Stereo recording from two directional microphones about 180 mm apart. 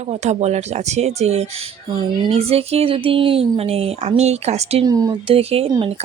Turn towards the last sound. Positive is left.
turn(degrees=-30)  # may be behind; listen again after turning